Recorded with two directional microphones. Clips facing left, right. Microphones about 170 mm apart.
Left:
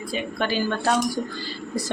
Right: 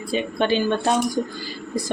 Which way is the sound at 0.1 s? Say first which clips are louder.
Right 5 dB; 25° right (ahead or behind).